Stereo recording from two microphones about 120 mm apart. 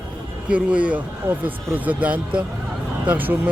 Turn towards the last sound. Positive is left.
turn(degrees=-15)  # may be behind; listen again after turning